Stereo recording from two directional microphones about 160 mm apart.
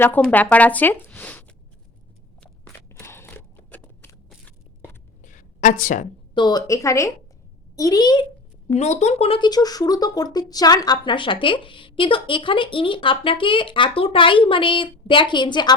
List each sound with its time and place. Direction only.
0.0 s speech: 10° left (ahead or behind)
2.9 s a sound: 15° left (ahead or behind)
4.4 s crunch: 10° left (ahead or behind)
5.2 s a sound: 55° left (ahead or behind)
6.3 s a woman's voice: 25° left (ahead or behind)
8.6 s speech: 45° left (ahead or behind); by 15.7 s 30° left (ahead or behind)